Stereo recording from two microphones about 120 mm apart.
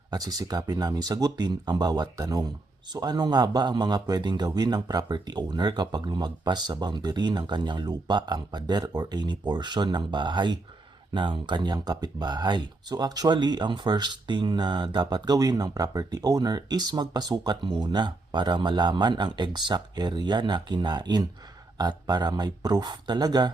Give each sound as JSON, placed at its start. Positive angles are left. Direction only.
{"t": 0.1, "sound": "speech", "side_deg": -30}